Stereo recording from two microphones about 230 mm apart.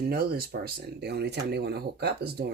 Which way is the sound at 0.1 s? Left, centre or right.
Right.